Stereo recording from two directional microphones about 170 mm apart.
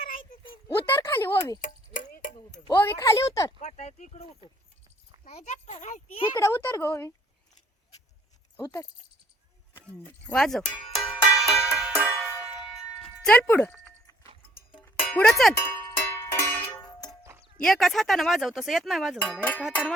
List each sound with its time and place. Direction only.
0.7 s speech: 15° left (ahead or behind)
1.6 s tick-tock: 50° left (ahead or behind)
2.6 s speech: 20° left (ahead or behind)
3.6 s speech: 40° left (ahead or behind)
6.3 s speech: 15° left (ahead or behind)
9.7 s speech: 10° left (ahead or behind)
10.3 s music: centre (ahead or behind)
15.1 s a sound: 5° left (ahead or behind)
15.6 s music: 20° left (ahead or behind)
17.6 s a sound: centre (ahead or behind)